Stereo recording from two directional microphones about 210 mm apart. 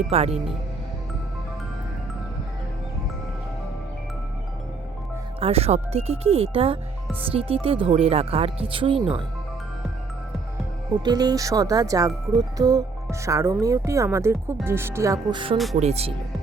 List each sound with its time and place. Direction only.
0.1 s speech: 30° right (ahead or behind)
5.4 s speech: 30° right (ahead or behind)
11.0 s speech: 20° right (ahead or behind)